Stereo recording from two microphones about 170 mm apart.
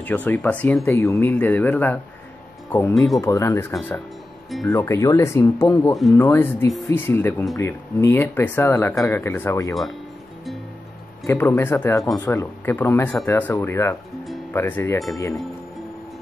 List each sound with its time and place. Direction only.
0.0 s speech: 10° left (ahead or behind)
2.9 s speech: centre (ahead or behind)
3.2 s speech: 15° left (ahead or behind)
11.2 s speech: 15° left (ahead or behind)